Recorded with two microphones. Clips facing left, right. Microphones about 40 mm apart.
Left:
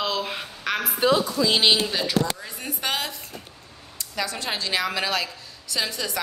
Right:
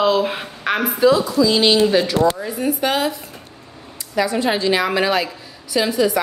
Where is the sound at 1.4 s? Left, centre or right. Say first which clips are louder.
Right 7 dB; right.